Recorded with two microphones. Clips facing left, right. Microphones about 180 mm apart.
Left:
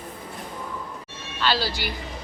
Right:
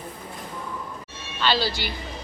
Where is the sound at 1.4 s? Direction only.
10° left (ahead or behind).